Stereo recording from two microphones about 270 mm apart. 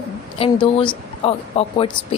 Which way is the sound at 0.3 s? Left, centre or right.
Centre.